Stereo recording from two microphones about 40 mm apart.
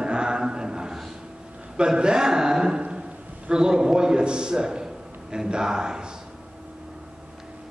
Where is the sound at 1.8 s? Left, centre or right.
Right.